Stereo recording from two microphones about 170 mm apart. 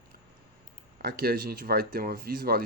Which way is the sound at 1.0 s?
65° right (ahead or behind).